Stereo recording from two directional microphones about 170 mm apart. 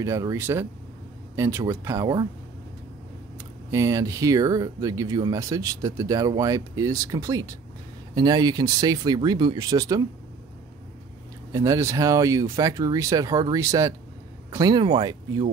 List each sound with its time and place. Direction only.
0.0 s speech: 20° right (ahead or behind)
3.3 s speech: 20° right (ahead or behind)
11.5 s speech: 20° right (ahead or behind)